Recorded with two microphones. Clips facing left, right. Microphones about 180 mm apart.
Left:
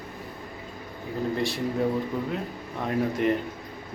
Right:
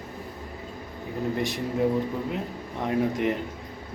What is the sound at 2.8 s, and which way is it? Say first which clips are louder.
Speech: right 1 dB; 15° right (ahead or behind).